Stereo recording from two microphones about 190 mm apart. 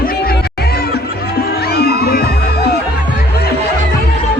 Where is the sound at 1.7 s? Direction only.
55° left (ahead or behind).